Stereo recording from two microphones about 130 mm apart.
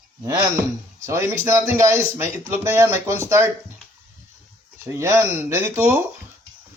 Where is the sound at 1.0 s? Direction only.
20° right (ahead or behind).